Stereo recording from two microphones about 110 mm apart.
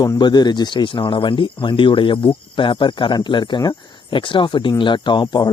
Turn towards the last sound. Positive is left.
turn(degrees=40)  # may be behind; listen again after turning